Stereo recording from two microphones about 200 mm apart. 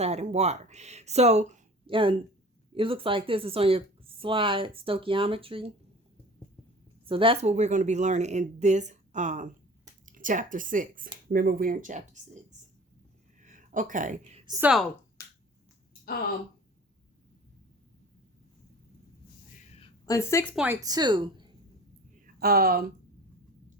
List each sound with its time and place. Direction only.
0.0 s speech: 35° right (ahead or behind)
7.0 s speech: 25° right (ahead or behind)
13.4 s a sound: 40° right (ahead or behind)
14.6 s speech: 5° right (ahead or behind)
19.5 s a sound: 40° left (ahead or behind)
19.8 s a sound: 15° left (ahead or behind)
20.6 s speech: 5° right (ahead or behind)
20.8 s speech: 20° right (ahead or behind)
22.4 s speech: 50° right (ahead or behind)